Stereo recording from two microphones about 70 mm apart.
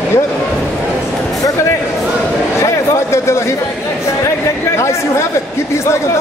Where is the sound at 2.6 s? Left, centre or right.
Left.